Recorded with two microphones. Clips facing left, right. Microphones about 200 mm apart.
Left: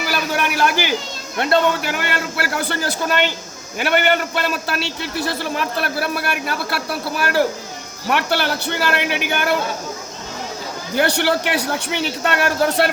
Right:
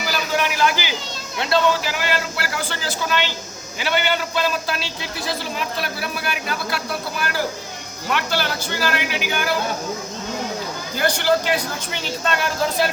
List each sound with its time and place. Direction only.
0.1 s a sound: 55° left (ahead or behind)
1.4 s a man's voice: 55° left (ahead or behind)
10.9 s a man's voice: 65° left (ahead or behind)